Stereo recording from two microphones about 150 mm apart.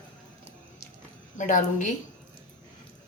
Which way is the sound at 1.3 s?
60° left (ahead or behind).